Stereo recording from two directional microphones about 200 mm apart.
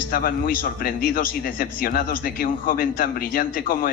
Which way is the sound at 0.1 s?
45° left (ahead or behind).